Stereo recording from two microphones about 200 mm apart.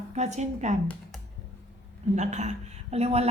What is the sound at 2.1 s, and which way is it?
A man's voice, 35° right (ahead or behind).